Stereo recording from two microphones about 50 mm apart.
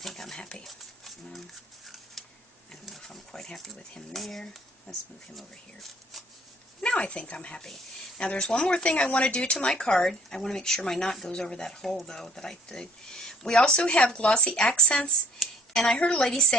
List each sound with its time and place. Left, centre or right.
0.0 s speech: centre
0.7 s a sound: centre
4.1 s speech: centre
5.3 s speech: centre
6.8 s a woman's voice: left
15.3 s a sound: centre
16.0 s speech: centre